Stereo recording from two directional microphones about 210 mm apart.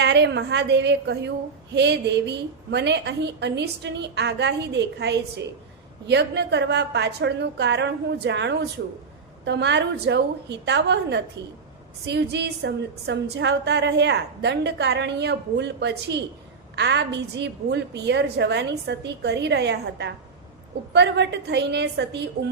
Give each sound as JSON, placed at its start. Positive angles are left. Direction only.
{"t": 0.0, "sound": "a woman's voice", "side_deg": -55}